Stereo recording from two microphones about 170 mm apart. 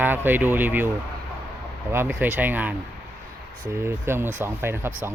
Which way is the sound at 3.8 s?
15° right (ahead or behind).